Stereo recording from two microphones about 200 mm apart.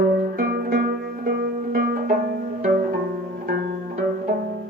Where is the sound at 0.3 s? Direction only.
50° right (ahead or behind).